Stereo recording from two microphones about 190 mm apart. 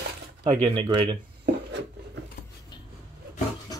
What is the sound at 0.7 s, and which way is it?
Speech, 25° right (ahead or behind).